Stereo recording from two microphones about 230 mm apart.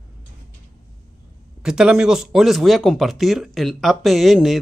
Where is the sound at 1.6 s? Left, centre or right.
Centre.